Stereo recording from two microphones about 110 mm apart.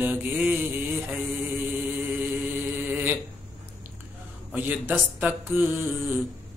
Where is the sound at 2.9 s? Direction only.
20° right (ahead or behind).